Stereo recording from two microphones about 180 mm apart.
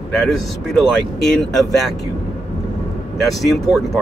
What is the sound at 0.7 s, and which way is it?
Speech, centre (ahead or behind).